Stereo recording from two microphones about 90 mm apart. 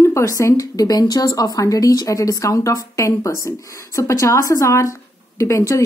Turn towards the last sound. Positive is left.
turn(degrees=35)  # may be behind; listen again after turning